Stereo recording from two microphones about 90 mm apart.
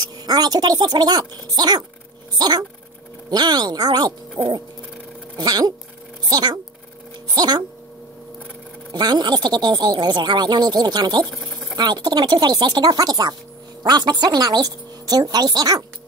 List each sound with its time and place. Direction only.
0.3 s speech: 50° right (ahead or behind)
4.4 s a sound: 35° right (ahead or behind)
5.4 s speech: 45° right (ahead or behind)
8.9 s speech: 55° right (ahead or behind)